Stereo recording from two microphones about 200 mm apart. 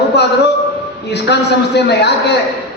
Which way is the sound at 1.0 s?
55° left (ahead or behind).